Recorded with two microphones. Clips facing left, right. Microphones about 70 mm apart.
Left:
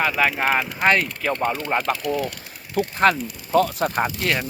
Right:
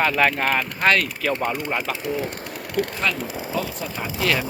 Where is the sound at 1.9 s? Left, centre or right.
Right.